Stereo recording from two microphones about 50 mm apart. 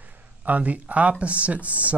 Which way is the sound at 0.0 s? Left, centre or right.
Right.